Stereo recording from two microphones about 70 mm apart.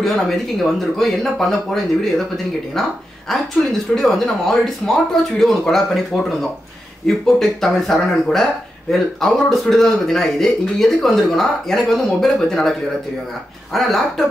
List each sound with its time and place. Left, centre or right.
0.0 s speech: centre
13.7 s speech: centre